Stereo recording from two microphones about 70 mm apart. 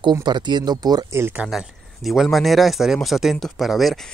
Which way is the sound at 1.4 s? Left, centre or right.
Centre.